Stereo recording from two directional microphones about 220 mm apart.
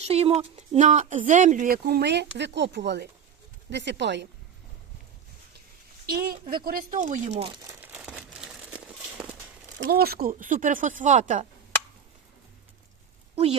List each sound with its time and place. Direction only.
0.0 s speech: 30° right (ahead or behind); by 4.3 s 50° right (ahead or behind)
6.5 s crumpling: 40° right (ahead or behind); by 9.2 s 5° right (ahead or behind)
9.7 s speech: 40° right (ahead or behind)
13.3 s speech: 30° right (ahead or behind)